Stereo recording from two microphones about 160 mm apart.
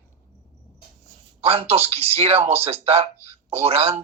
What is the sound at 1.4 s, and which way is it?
Speech, 40° right (ahead or behind).